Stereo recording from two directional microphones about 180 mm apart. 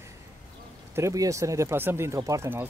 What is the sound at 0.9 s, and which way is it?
Speech, 15° right (ahead or behind).